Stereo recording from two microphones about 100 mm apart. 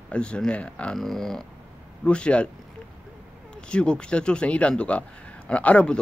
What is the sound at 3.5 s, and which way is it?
Speech, 10° left (ahead or behind).